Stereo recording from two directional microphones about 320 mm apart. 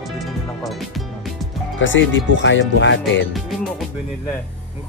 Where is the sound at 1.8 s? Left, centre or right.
Left.